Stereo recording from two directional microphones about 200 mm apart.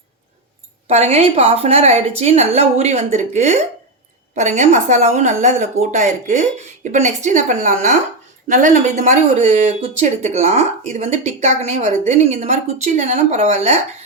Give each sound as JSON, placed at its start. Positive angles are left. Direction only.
{"t": 0.9, "sound": "speech", "side_deg": -35}